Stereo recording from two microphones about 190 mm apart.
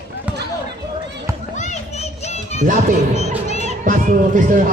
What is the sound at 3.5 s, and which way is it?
Crowd, 40° right (ahead or behind).